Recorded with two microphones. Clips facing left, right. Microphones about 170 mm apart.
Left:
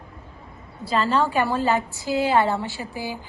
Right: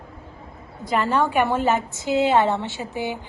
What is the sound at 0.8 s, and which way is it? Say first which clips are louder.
A woman's voice: even; 15° right (ahead or behind).